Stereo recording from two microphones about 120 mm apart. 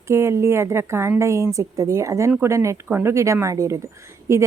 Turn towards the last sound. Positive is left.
turn(degrees=-25)  # may be behind; listen again after turning